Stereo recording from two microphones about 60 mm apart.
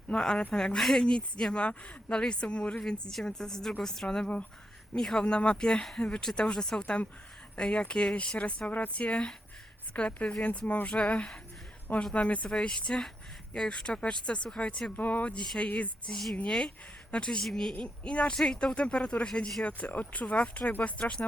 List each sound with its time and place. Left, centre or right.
0.2 s speech: centre
14.9 s speech: left; by 17.7 s centre
17.7 s speech: centre